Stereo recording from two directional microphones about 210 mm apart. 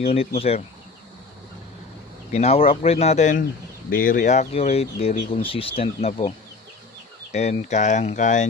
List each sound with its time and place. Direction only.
0.0 s speech: 30° left (ahead or behind)
2.3 s speech: 30° left (ahead or behind)
7.3 s speech: 30° left (ahead or behind)